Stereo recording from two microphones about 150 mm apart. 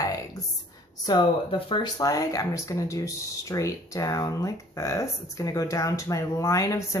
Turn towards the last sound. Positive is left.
turn(degrees=20)  # may be behind; listen again after turning